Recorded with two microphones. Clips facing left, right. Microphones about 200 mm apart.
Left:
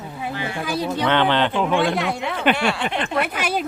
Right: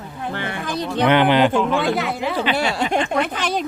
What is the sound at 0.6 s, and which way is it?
Speech, 10° left (ahead or behind).